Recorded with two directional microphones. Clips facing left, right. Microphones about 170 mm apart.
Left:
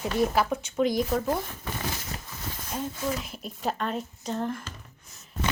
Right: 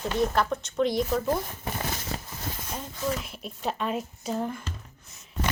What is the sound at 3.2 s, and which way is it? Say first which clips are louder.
Speech: left 1 dB; centre (ahead or behind).